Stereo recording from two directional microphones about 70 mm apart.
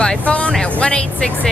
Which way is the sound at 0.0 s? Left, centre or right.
Centre.